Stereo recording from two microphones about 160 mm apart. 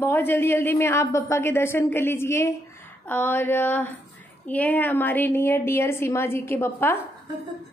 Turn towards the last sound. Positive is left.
turn(degrees=15)  # may be behind; listen again after turning